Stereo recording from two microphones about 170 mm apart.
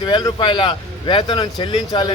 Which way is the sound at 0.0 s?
25° left (ahead or behind).